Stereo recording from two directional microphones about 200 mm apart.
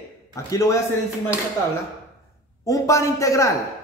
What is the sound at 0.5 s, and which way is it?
Speech, 15° left (ahead or behind).